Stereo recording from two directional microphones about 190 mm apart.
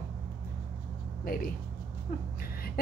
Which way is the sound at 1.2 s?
50° left (ahead or behind).